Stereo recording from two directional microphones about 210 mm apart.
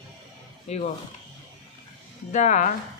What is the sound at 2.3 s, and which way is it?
Speech, 35° left (ahead or behind).